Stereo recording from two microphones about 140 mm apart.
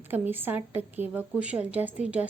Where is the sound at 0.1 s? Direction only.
15° right (ahead or behind).